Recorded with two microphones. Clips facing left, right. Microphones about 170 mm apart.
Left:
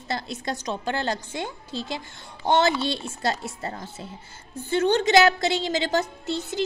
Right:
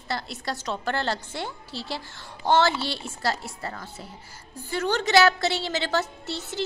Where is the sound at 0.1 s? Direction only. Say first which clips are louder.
Left 2 dB; 20° left (ahead or behind).